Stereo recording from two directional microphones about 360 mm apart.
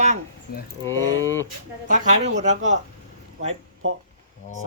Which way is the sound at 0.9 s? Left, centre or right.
Centre.